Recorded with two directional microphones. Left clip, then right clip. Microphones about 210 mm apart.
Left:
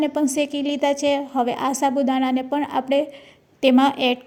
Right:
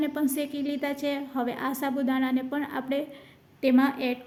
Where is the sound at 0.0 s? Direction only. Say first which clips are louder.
Left 7 dB; 25° left (ahead or behind).